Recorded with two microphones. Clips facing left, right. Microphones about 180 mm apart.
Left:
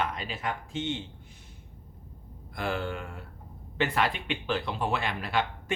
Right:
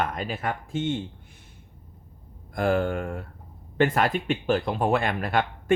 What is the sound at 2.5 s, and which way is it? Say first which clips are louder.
Speech: right 8 dB; 50° right (ahead or behind).